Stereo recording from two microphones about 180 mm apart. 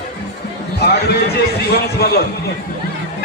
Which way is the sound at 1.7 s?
60° left (ahead or behind).